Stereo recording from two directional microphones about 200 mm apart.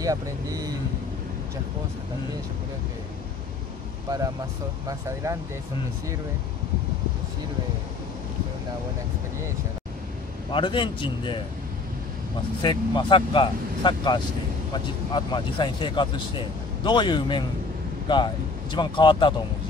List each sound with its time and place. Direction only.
0.0 s speech: 15° right (ahead or behind)
4.8 s speech: 15° right (ahead or behind)
10.5 s speech: 25° left (ahead or behind)
12.6 s speech: 25° left (ahead or behind)